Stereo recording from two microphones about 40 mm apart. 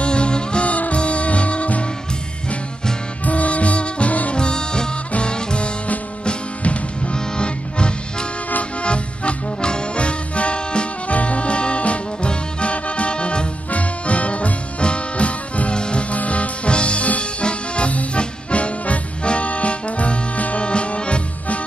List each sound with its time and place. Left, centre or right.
0.0 s music: left
3.3 s music: left
4.4 s music: left